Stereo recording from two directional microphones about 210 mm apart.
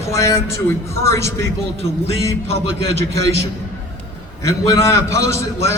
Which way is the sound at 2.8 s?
30° left (ahead or behind).